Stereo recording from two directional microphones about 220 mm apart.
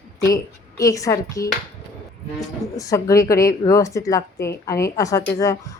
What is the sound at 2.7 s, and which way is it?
A woman's voice, 15° left (ahead or behind).